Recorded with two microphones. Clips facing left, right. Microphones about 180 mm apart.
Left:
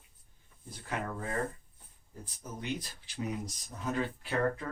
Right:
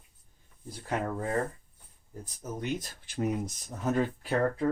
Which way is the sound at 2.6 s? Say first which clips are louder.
Right 3 dB; 50° right (ahead or behind).